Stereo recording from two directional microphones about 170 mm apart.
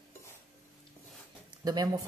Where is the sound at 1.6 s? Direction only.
20° right (ahead or behind).